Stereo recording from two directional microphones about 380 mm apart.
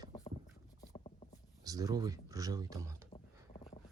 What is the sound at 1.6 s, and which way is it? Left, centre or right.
Speech, centre.